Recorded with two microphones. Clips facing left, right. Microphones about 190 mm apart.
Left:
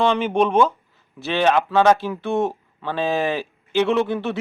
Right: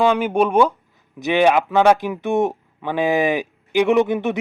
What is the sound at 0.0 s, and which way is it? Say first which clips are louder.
Speech: right 2 dB; 10° right (ahead or behind).